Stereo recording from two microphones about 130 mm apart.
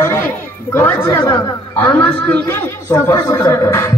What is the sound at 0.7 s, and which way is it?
A man's voice, 20° left (ahead or behind).